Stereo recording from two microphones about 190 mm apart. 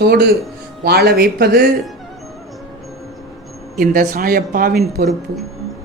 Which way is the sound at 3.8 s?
50° right (ahead or behind).